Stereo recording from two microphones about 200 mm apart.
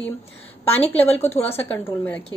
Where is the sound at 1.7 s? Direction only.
10° left (ahead or behind).